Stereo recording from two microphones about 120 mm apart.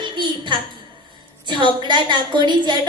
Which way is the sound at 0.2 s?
40° right (ahead or behind).